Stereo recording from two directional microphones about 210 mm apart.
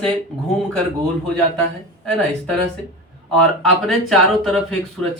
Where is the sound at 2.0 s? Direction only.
5° left (ahead or behind).